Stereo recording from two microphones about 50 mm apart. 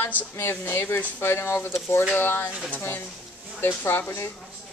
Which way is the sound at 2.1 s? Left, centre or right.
Left.